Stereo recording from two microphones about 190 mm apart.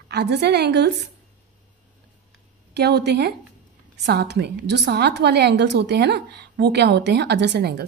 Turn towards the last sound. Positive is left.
turn(degrees=-60)  # may be behind; listen again after turning